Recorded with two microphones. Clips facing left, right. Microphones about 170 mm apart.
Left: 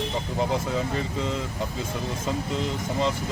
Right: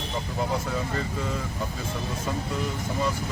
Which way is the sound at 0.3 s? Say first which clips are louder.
Left 3 dB; 20° left (ahead or behind).